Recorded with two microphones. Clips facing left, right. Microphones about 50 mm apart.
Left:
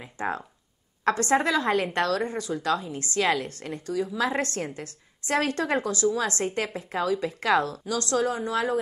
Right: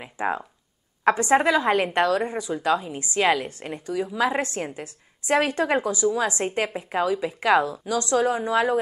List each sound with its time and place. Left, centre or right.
1.0 s a woman's voice: right